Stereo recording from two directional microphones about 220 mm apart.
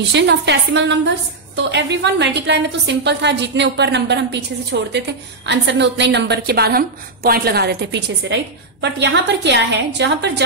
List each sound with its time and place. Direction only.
0.1 s a woman's voice: 50° right (ahead or behind)